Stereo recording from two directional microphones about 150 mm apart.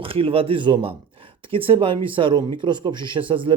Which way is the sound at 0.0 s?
35° right (ahead or behind).